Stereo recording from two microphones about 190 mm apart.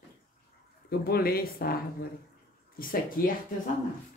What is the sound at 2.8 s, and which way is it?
Speech, 50° left (ahead or behind).